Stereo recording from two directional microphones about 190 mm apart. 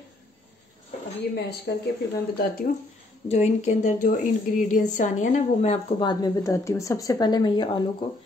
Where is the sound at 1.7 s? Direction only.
70° left (ahead or behind).